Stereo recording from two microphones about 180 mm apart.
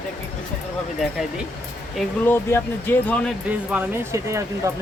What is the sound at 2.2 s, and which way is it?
Speech, 10° left (ahead or behind).